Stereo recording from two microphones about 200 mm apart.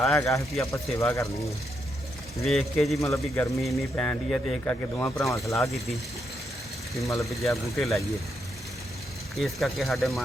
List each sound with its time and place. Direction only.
0.2 s speech: 15° left (ahead or behind)
2.4 s speech: centre (ahead or behind)
3.0 s speech: 15° left (ahead or behind)
7.4 s speech: centre (ahead or behind)
9.3 s speech: centre (ahead or behind)